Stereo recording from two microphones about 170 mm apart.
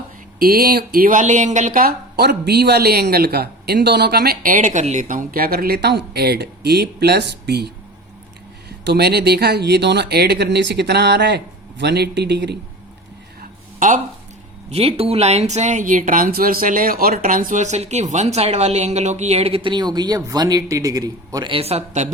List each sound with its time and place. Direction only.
0.3 s speech: 60° right (ahead or behind); by 7.7 s 75° right (ahead or behind)
8.8 s speech: 75° right (ahead or behind)
13.4 s a sound: 50° right (ahead or behind)
14.7 s speech: 35° right (ahead or behind)